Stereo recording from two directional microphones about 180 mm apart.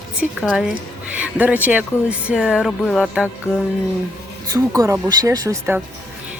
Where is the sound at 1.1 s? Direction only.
10° right (ahead or behind).